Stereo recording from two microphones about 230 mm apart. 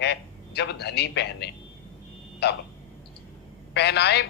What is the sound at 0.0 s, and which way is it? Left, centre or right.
A man's voice, left.